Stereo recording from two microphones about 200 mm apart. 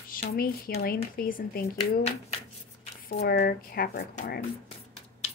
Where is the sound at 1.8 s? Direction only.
30° left (ahead or behind).